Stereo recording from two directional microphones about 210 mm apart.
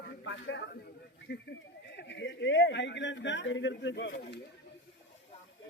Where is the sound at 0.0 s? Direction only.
55° left (ahead or behind).